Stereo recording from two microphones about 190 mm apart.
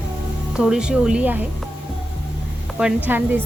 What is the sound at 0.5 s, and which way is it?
Speech, 5° right (ahead or behind).